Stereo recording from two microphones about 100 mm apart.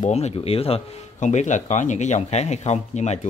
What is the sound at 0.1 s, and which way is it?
Speech, 85° left.